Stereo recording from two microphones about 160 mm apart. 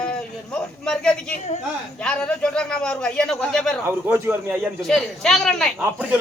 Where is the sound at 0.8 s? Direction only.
5° left (ahead or behind).